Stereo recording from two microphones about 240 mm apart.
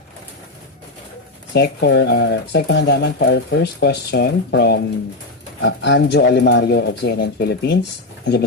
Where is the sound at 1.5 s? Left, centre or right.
Left.